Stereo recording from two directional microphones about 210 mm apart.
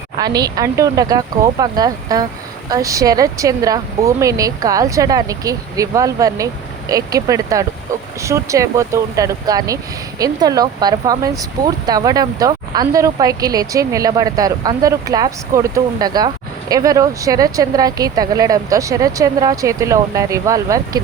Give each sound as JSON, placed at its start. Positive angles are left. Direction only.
{"t": 0.2, "sound": "speech", "side_deg": -20}